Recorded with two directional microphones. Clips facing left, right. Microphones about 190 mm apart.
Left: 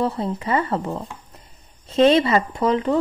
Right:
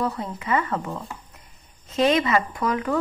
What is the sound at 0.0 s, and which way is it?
Speech, 30° left (ahead or behind).